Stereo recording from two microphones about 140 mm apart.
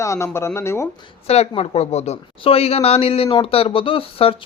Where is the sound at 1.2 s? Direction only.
50° left (ahead or behind).